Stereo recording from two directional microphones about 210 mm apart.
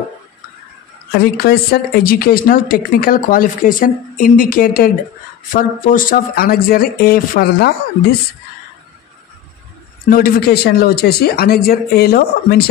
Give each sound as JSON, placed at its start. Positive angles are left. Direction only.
{"t": 1.1, "sound": "a woman's voice", "side_deg": 45}
{"t": 10.0, "sound": "a woman's voice", "side_deg": 45}